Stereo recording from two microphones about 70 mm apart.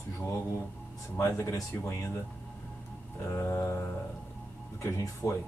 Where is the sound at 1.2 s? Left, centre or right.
Left.